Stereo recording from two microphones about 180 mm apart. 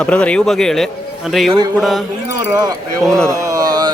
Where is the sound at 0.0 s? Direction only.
5° left (ahead or behind).